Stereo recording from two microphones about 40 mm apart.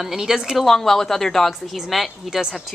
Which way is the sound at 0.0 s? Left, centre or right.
Centre.